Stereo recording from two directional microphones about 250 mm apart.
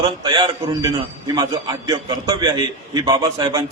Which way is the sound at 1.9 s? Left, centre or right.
Centre.